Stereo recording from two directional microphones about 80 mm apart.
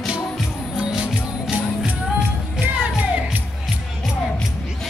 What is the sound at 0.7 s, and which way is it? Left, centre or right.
Music, centre.